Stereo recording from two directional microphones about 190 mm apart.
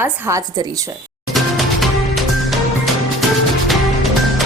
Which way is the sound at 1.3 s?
Centre (ahead or behind).